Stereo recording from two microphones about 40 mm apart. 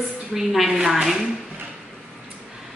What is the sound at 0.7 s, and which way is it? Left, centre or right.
Speech, centre.